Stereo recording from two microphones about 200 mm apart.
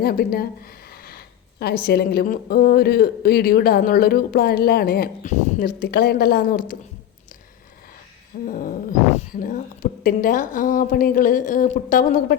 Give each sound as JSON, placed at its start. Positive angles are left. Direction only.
{"t": 0.0, "sound": "speech", "side_deg": 50}
{"t": 8.4, "sound": "speech", "side_deg": 40}